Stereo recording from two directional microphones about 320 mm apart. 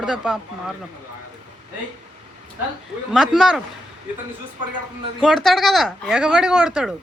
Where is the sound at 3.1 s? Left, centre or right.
Centre.